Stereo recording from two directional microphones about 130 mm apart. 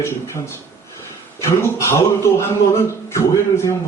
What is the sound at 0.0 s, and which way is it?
A man's voice, 20° left (ahead or behind).